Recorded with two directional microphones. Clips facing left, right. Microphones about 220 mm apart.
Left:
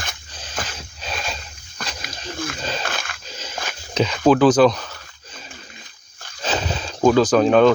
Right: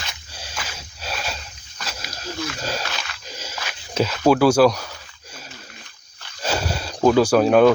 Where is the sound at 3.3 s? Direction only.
10° right (ahead or behind).